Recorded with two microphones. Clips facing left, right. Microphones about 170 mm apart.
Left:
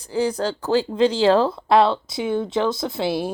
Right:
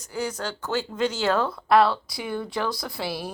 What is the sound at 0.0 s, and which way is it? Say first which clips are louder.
Speech: left 8 dB; 30° left (ahead or behind).